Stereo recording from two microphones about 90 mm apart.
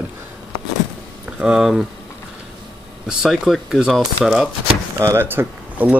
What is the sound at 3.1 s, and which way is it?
Speech, 5° right (ahead or behind).